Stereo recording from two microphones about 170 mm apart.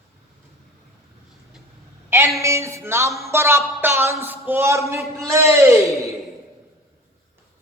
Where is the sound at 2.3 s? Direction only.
15° right (ahead or behind).